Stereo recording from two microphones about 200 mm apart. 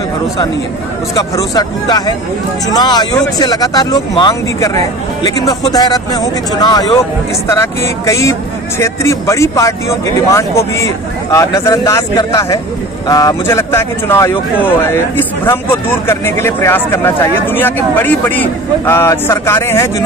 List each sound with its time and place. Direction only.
1.1 s speech: 20° left (ahead or behind)